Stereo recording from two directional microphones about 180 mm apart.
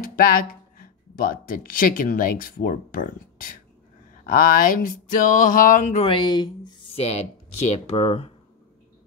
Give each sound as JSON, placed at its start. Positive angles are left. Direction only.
{"t": 0.0, "sound": "speech", "side_deg": 50}
{"t": 4.3, "sound": "a sound", "side_deg": 55}
{"t": 6.0, "sound": "speech", "side_deg": 25}